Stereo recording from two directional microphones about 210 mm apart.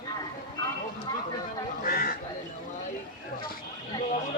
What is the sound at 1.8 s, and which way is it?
Speech, 45° left (ahead or behind).